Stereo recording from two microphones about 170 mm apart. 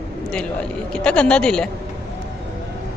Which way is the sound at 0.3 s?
5° left (ahead or behind).